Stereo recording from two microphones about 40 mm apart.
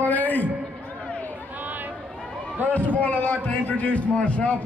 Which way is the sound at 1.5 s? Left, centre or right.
Right.